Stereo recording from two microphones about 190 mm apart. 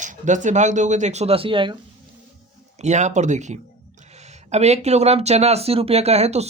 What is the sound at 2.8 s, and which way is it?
Speech, 40° right (ahead or behind).